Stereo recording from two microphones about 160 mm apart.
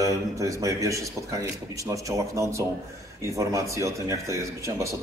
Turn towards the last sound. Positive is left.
turn(degrees=-20)  # may be behind; listen again after turning